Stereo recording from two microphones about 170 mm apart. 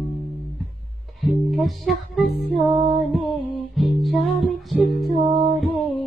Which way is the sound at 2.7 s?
40° right (ahead or behind).